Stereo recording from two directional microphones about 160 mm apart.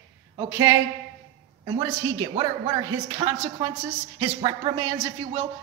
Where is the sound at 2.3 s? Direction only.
30° right (ahead or behind).